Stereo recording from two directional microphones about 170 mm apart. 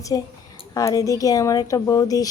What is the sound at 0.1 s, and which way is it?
Speech, 20° left (ahead or behind).